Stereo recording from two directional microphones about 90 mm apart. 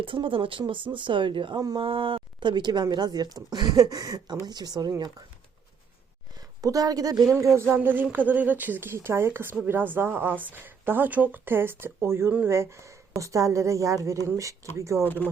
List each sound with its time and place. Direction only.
0.0 s speech: 70° right (ahead or behind)
1.8 s speech: 80° right; by 4.9 s 50° right (ahead or behind)
6.6 s a woman's voice: 40° right (ahead or behind)
7.8 s a woman's voice: 20° right (ahead or behind)
15.0 s speech: 20° left (ahead or behind)